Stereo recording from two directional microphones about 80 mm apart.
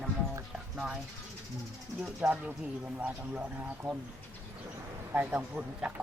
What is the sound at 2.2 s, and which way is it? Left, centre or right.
Speech, centre.